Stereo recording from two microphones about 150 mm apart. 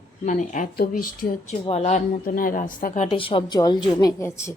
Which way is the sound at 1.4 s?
50° left (ahead or behind).